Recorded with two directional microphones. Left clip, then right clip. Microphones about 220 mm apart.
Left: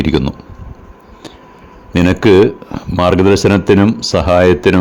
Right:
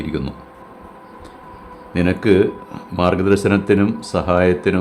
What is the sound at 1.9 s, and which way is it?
Speech, 35° left (ahead or behind).